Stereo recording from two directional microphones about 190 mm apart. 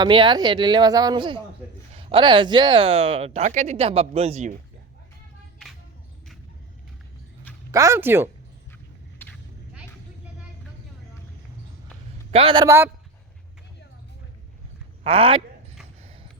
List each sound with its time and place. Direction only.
0.0 s speech: 25° right (ahead or behind)
7.7 s speech: 15° right (ahead or behind)
12.3 s speech: 30° right (ahead or behind)
12.6 s speech: 15° right (ahead or behind)
15.0 s speech: 30° right (ahead or behind)